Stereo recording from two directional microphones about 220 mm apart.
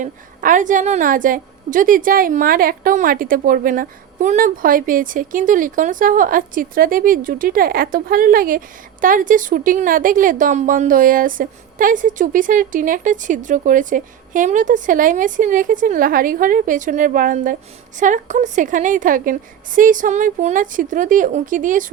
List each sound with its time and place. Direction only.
0.0 s a woman's voice: 35° right (ahead or behind)